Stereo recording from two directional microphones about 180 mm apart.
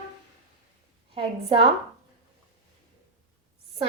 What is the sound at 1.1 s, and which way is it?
Speech, 30° right (ahead or behind).